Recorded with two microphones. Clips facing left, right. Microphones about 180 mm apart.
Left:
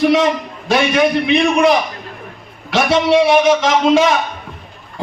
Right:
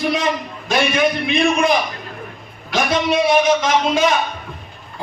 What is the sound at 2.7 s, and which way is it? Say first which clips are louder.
A man's voice: left 5 dB; 80° left.